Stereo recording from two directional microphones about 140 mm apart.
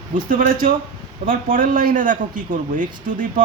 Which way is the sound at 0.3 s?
90° right.